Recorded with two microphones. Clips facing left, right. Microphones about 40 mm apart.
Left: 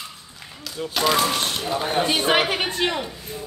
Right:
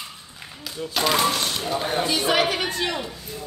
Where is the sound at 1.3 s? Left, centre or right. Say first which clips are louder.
Left 1 dB; left.